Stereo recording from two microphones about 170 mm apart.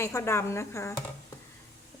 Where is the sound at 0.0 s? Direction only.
15° left (ahead or behind).